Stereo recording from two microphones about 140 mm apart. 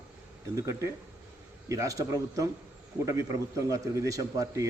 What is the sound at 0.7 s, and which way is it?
A man's voice, 20° right (ahead or behind).